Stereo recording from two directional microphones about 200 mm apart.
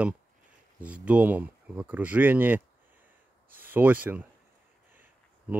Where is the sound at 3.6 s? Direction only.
10° right (ahead or behind).